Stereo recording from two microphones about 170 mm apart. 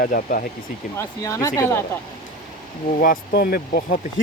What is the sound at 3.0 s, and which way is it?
Speech, 60° left (ahead or behind).